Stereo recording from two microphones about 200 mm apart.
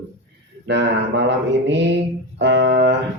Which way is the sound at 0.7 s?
60° right (ahead or behind).